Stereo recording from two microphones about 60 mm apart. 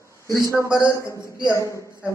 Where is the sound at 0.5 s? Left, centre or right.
Left.